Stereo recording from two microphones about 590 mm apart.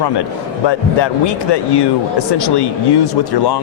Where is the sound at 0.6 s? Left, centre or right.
Left.